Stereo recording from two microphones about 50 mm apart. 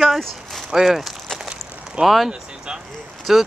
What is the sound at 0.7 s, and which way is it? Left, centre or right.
Speech, centre.